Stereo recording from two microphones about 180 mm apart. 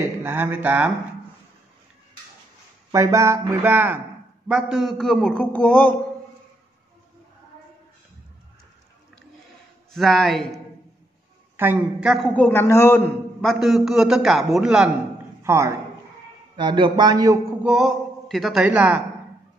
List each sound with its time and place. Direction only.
0.2 s speech: 10° right (ahead or behind)
2.9 s a man's voice: 15° right (ahead or behind); by 5.9 s 5° left (ahead or behind)
9.9 s a man's voice: centre (ahead or behind)
11.5 s speech: 10° right (ahead or behind)
12.4 s a man's voice: 10° left (ahead or behind)
13.4 s a man's voice: centre (ahead or behind)
15.4 s a man's voice: 15° right (ahead or behind)
17.6 s a man's voice: centre (ahead or behind)